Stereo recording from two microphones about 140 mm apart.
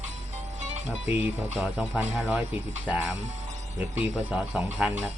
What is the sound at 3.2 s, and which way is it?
Speech, 60° right (ahead or behind).